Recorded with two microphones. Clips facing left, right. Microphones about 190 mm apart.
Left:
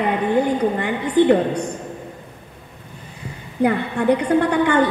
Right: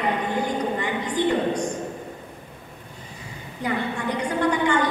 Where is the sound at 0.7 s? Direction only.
60° left (ahead or behind).